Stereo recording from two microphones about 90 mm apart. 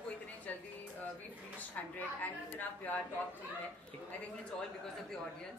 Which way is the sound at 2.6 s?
20° left (ahead or behind).